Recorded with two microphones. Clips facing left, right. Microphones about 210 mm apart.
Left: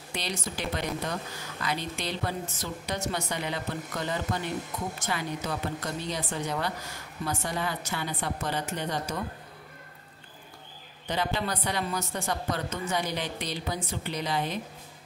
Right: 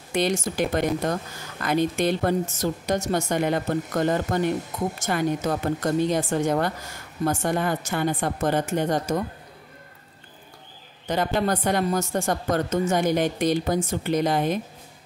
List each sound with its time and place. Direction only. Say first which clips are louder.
0.1 s a woman's voice: right 11 dB; 50° right (ahead or behind)
11.1 s a woman's voice: right 7 dB; 45° right (ahead or behind)